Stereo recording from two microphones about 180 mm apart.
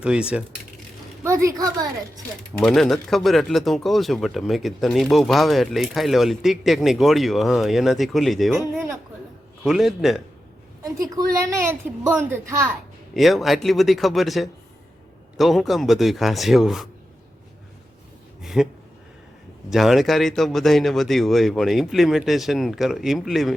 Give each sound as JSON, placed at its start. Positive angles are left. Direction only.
{"t": 0.0, "sound": "a woman's voice", "side_deg": -5}
{"t": 2.6, "sound": "speech", "side_deg": 5}
{"t": 8.6, "sound": "a sound", "side_deg": -15}
{"t": 9.6, "sound": "speech", "side_deg": 0}
{"t": 11.0, "sound": "a woman's voice", "side_deg": -20}
{"t": 13.1, "sound": "speech", "side_deg": 0}
{"t": 18.4, "sound": "a sound", "side_deg": 0}
{"t": 19.7, "sound": "speech", "side_deg": 0}